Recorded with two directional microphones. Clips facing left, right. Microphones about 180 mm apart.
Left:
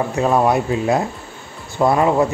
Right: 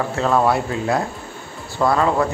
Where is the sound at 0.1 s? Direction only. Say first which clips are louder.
Left 1 dB; 15° left (ahead or behind).